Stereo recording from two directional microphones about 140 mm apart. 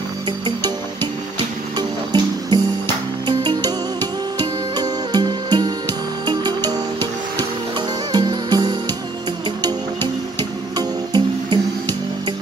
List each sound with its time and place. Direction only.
1.8 s music: 30° right (ahead or behind)
8.1 s music: 30° right (ahead or behind)
10.8 s music: 35° right (ahead or behind)